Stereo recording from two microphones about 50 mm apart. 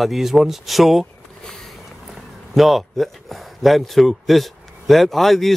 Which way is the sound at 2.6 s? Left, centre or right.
Centre.